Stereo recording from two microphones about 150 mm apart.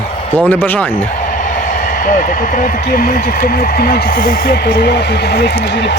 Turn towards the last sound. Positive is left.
turn(degrees=90)